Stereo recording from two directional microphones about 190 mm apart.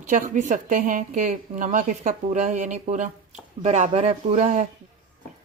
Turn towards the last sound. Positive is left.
turn(degrees=-40)  # may be behind; listen again after turning